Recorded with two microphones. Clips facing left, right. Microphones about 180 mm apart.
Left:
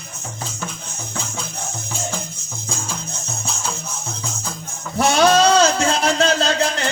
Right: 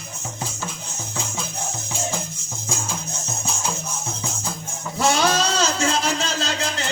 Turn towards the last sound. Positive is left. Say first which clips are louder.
# left 6 dB
turn(degrees=60)  # may be behind; listen again after turning